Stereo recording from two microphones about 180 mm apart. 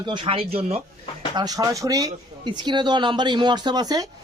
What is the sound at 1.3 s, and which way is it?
Speech, 20° right (ahead or behind).